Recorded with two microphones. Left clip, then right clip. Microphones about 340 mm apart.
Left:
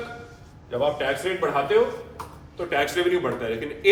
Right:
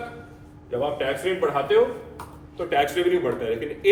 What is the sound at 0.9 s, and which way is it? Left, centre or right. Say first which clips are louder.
A man's voice: right 1 dB; centre.